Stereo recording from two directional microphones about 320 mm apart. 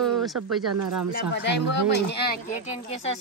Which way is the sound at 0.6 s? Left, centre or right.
Right.